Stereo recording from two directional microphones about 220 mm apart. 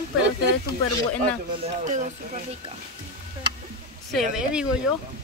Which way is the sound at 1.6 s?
35° right (ahead or behind).